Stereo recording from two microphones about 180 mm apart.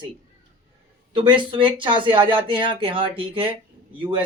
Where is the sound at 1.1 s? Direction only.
25° right (ahead or behind).